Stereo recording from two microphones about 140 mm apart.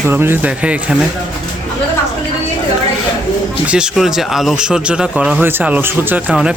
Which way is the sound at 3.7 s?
5° right (ahead or behind).